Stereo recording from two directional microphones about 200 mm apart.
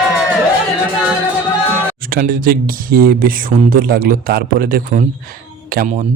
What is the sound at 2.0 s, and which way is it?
Speech, 45° right (ahead or behind).